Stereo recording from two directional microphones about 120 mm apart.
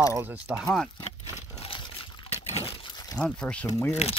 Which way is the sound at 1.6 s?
45° left (ahead or behind).